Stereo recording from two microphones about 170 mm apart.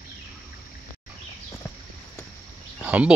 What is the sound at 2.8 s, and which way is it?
Speech, 5° right (ahead or behind).